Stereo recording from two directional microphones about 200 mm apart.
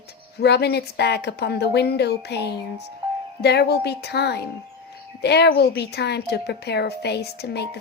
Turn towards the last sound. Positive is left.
turn(degrees=55)  # may be behind; listen again after turning